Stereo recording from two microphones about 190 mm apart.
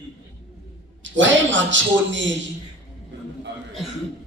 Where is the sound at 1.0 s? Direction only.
75° right (ahead or behind).